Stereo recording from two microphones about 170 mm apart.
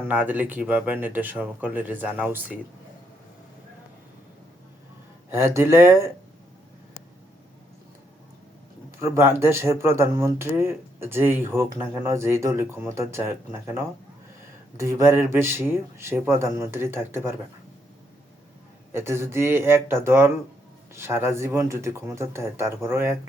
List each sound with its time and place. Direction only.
0.1 s speech: 10° right (ahead or behind)
5.3 s speech: 15° right (ahead or behind)
9.0 s speech: 15° right (ahead or behind)
18.9 s speech: 15° right (ahead or behind)